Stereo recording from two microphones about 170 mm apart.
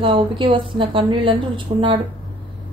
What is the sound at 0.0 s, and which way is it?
A woman's voice, 30° right (ahead or behind).